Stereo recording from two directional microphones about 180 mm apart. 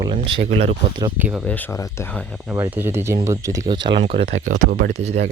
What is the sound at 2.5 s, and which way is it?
Speech, 10° right (ahead or behind).